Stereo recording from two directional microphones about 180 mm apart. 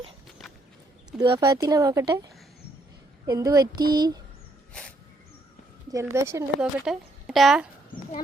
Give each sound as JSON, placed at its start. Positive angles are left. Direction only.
{"t": 1.2, "sound": "speech", "side_deg": -25}
{"t": 3.2, "sound": "speech", "side_deg": -20}
{"t": 4.7, "sound": "dog", "side_deg": 5}
{"t": 5.9, "sound": "a woman's voice", "side_deg": -15}
{"t": 6.6, "sound": "speech", "side_deg": -5}